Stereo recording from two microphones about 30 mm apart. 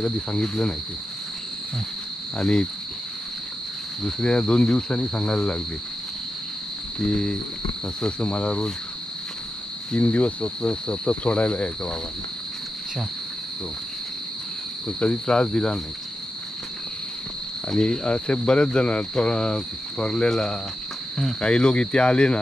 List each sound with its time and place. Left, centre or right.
0.4 s cricket: left
2.3 s speech: left
4.0 s cricket: left
5.3 s speech: left
7.0 s speech: left
9.9 s cricket: left
10.6 s speech: left
11.2 s cricket: left
15.0 s cricket: left
17.7 s speech: left
20.2 s cricket: left
21.4 s speech: left